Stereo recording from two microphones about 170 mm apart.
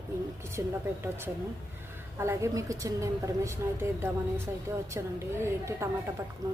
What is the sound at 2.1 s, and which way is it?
A woman's voice, 15° right (ahead or behind).